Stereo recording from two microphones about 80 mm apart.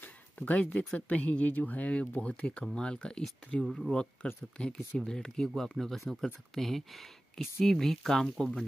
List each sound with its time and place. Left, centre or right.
0.0 s a sound: centre
0.9 s speech: centre
3.6 s speech: centre
3.9 s speech: centre